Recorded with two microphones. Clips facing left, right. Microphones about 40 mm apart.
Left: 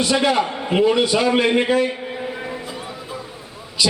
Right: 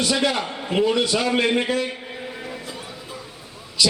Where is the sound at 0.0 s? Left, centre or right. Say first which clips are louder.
Left 4 dB; centre.